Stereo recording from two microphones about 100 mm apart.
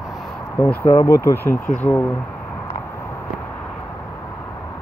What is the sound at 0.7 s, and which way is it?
Speech, 20° left (ahead or behind).